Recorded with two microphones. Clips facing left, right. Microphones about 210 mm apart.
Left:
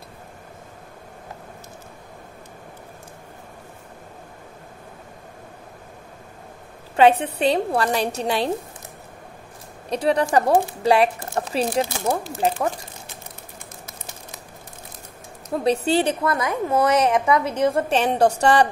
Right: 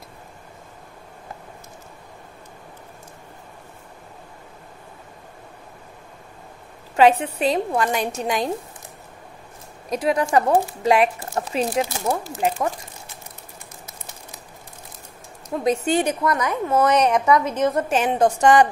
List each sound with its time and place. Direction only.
7.0 s speech: 35° left (ahead or behind)
9.8 s speech: 35° left (ahead or behind)
15.5 s speech: 35° left (ahead or behind)